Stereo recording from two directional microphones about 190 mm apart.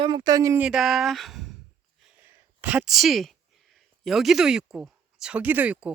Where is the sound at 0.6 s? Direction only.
Centre (ahead or behind).